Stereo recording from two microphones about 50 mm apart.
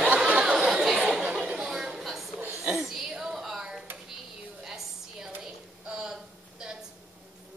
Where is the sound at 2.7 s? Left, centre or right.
Centre.